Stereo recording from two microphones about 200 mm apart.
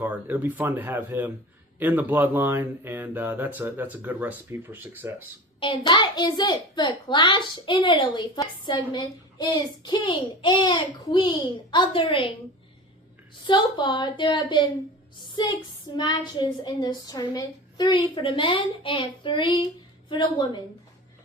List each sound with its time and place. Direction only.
0.0 s speech: 10° right (ahead or behind)
5.5 s a child's voice: 25° left (ahead or behind)
13.5 s a child's voice: 20° left (ahead or behind)